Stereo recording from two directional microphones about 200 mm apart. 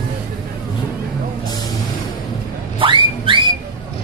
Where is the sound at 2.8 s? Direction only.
25° right (ahead or behind).